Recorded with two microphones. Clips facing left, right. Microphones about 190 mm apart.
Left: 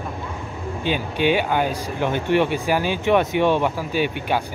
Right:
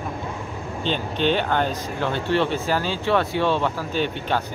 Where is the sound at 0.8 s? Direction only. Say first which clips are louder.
Left 2 dB; 10° left (ahead or behind).